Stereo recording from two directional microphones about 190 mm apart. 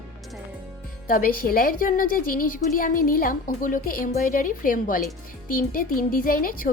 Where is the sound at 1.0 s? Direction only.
50° left (ahead or behind).